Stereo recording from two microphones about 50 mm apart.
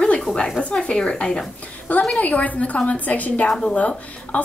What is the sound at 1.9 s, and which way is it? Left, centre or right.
A woman's voice, left.